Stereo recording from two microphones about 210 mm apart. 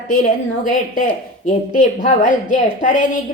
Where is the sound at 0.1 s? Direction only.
40° left (ahead or behind).